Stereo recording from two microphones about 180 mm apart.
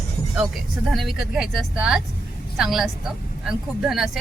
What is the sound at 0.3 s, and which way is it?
Speech, centre (ahead or behind).